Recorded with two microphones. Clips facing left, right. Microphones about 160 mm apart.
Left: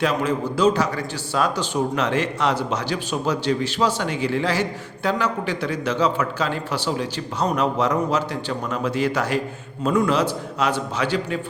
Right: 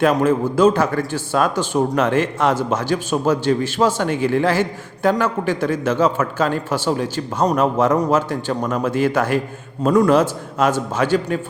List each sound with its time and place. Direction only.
0.0 s a man's voice: 50° right (ahead or behind)